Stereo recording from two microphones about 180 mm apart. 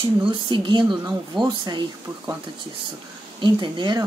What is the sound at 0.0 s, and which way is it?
Speech, 25° right (ahead or behind).